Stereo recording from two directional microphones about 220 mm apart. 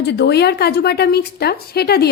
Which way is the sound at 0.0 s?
50° left (ahead or behind).